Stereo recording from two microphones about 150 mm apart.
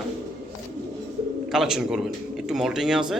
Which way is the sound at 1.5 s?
5° right (ahead or behind).